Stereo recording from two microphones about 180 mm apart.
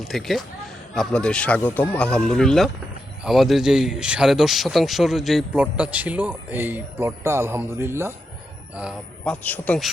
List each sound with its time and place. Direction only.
0.1 s a man's voice: centre (ahead or behind)
9.2 s a man's voice: 10° left (ahead or behind)